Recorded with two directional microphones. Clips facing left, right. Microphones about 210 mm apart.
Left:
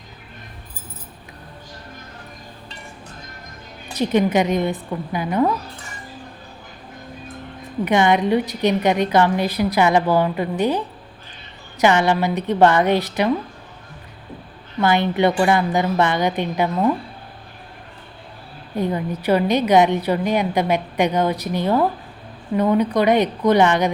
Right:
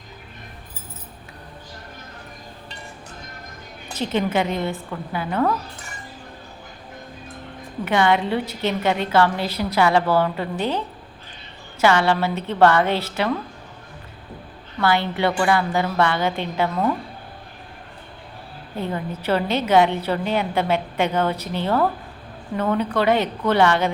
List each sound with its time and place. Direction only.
3.9 s a woman's voice: 15° left (ahead or behind)
7.9 s a woman's voice: 15° left (ahead or behind)
14.8 s a woman's voice: 20° left (ahead or behind)
18.8 s a woman's voice: 15° left (ahead or behind)